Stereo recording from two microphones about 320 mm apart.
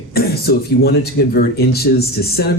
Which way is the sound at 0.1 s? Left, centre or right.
Left.